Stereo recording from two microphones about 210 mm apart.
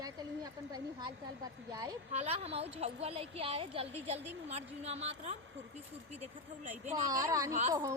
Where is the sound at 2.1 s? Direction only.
30° right (ahead or behind).